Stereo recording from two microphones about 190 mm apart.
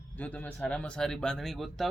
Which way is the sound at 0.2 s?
5° left (ahead or behind).